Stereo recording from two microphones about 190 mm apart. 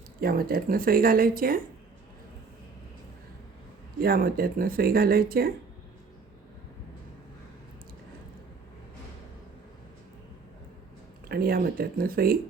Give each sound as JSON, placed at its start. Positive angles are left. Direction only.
{"t": 0.2, "sound": "speech", "side_deg": -50}
{"t": 4.0, "sound": "speech", "side_deg": -50}
{"t": 11.3, "sound": "speech", "side_deg": -50}